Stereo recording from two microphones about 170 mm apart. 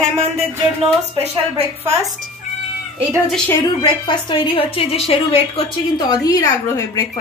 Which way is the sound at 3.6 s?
25° left (ahead or behind).